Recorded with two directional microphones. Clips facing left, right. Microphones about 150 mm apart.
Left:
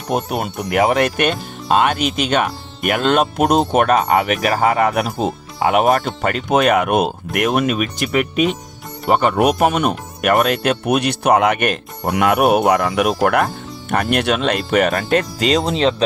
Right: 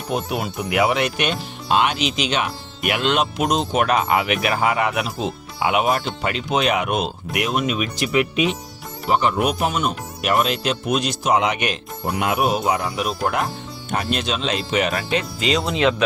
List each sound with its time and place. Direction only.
0.1 s speech: 50° left (ahead or behind); by 16.0 s 35° left (ahead or behind)